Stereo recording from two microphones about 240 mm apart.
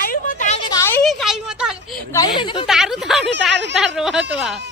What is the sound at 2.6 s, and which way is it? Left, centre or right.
Speech, centre.